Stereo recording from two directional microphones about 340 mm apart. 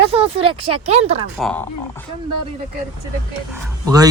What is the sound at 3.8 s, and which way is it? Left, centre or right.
Speech, centre.